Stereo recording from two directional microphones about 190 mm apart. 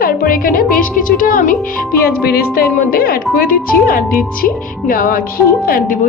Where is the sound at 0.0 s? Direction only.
50° left (ahead or behind).